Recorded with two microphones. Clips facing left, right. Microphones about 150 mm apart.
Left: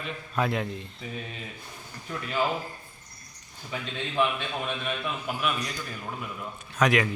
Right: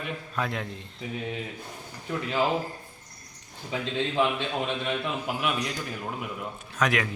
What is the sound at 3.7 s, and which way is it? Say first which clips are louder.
A man's voice: right 5 dB; 25° right (ahead or behind).